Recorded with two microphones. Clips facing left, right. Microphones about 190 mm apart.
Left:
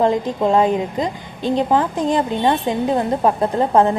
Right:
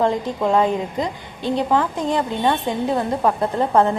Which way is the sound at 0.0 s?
20° left (ahead or behind).